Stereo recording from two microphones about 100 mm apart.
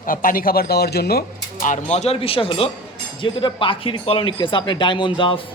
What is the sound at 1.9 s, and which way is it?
Speech, 90° left.